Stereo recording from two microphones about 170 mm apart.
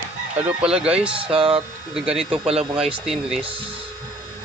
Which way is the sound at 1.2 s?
35° right (ahead or behind).